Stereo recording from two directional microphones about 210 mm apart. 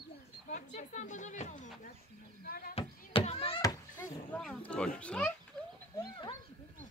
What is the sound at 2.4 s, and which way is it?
Speech, 45° left (ahead or behind).